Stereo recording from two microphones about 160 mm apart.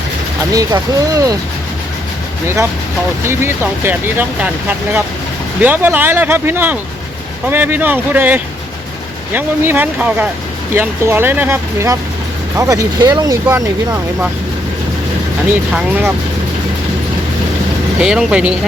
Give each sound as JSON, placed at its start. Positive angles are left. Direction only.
{"t": 0.5, "sound": "speech", "side_deg": -20}
{"t": 3.2, "sound": "speech", "side_deg": -15}
{"t": 15.7, "sound": "speech", "side_deg": -10}
{"t": 18.0, "sound": "speech", "side_deg": -5}